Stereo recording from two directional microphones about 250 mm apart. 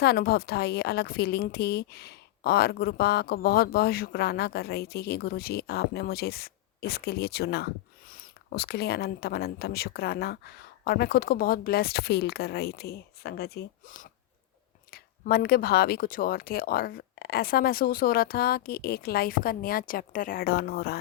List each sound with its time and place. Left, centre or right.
0.0 s a woman's voice: left